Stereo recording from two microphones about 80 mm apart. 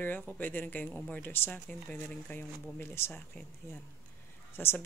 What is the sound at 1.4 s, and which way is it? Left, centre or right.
Speech, centre.